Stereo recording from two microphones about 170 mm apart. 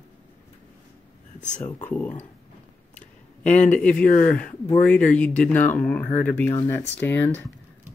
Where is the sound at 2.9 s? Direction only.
10° left (ahead or behind).